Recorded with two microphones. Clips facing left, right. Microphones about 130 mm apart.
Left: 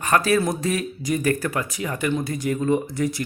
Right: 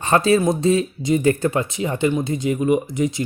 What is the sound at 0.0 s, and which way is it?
Speech, 25° right (ahead or behind).